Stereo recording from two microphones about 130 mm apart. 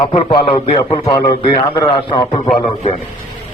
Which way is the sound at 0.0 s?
40° left (ahead or behind).